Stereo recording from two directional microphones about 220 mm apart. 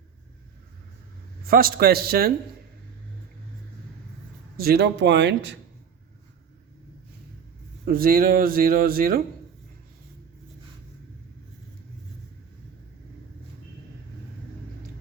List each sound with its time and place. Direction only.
1.5 s a man's voice: 45° right (ahead or behind)
4.5 s a man's voice: 45° right (ahead or behind)
7.9 s a man's voice: 40° right (ahead or behind)